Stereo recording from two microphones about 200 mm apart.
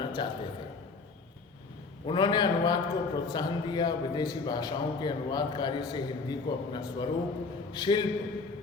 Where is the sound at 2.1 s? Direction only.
20° left (ahead or behind).